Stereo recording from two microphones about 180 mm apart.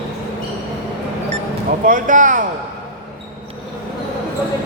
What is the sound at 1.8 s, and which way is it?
Speech, 45° right (ahead or behind).